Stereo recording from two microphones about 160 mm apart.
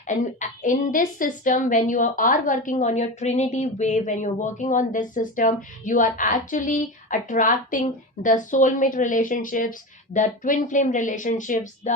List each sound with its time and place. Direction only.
0.1 s a woman's voice: 50° left (ahead or behind)